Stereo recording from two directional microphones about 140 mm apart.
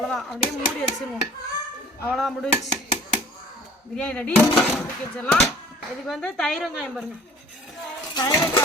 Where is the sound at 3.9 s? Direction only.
10° left (ahead or behind).